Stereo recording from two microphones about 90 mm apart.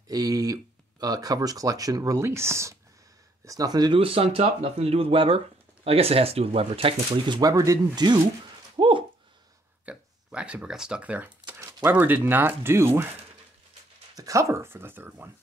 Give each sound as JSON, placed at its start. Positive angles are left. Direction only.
{"t": 0.1, "sound": "speech", "side_deg": -40}
{"t": 3.4, "sound": "speech", "side_deg": -45}
{"t": 3.9, "sound": "speech", "side_deg": -90}
{"t": 7.5, "sound": "speech", "side_deg": -35}
{"t": 7.9, "sound": "speech", "side_deg": -55}
{"t": 8.7, "sound": "a sound", "side_deg": -65}
{"t": 9.8, "sound": "shuffling cards", "side_deg": -15}
{"t": 11.6, "sound": "speech", "side_deg": -20}
{"t": 14.1, "sound": "speech", "side_deg": -40}